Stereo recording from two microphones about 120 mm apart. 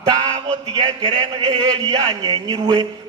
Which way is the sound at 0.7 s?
40° right (ahead or behind).